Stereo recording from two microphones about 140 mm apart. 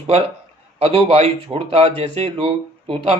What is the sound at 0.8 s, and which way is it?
A man's voice, 40° right (ahead or behind).